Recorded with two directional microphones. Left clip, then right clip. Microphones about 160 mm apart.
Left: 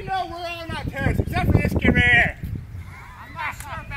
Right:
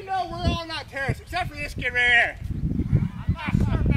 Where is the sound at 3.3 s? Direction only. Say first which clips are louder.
Left 2 dB; 50° right (ahead or behind).